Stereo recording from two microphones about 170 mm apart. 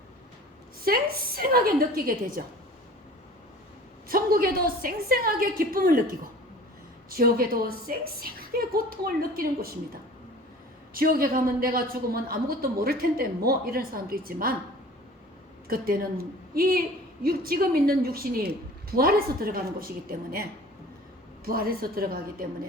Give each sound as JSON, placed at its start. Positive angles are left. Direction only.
{"t": 0.9, "sound": "a woman's voice", "side_deg": -60}
{"t": 4.1, "sound": "a woman's voice", "side_deg": -60}
{"t": 15.6, "sound": "a woman's voice", "side_deg": -60}